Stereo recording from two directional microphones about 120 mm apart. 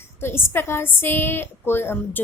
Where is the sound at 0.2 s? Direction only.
20° left (ahead or behind).